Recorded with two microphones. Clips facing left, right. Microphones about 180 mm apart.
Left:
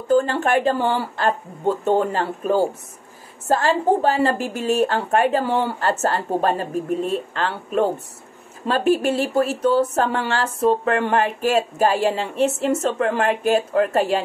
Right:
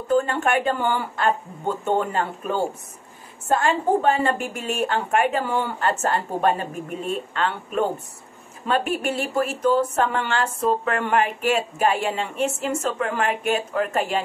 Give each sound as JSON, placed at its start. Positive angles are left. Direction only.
{"t": 0.1, "sound": "speech", "side_deg": 35}